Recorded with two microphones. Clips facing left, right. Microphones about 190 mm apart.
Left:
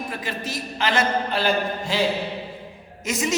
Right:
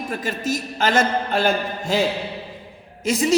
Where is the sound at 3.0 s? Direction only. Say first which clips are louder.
Right 5 dB; 30° right (ahead or behind).